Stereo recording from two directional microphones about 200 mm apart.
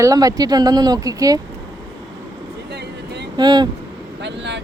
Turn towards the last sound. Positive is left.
turn(degrees=-60)  # may be behind; listen again after turning